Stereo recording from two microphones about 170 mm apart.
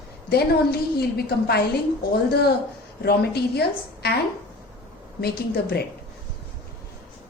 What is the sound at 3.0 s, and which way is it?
A woman's voice, 70° left (ahead or behind).